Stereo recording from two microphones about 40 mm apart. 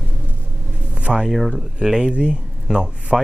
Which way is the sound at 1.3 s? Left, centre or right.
Centre.